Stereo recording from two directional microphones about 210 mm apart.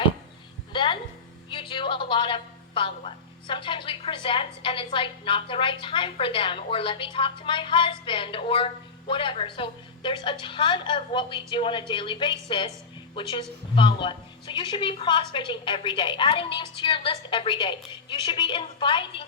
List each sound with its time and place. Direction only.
0.7 s music: 25° left (ahead or behind)
1.5 s a woman's voice: 25° left (ahead or behind)